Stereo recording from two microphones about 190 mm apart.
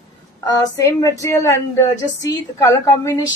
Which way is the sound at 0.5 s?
20° left (ahead or behind).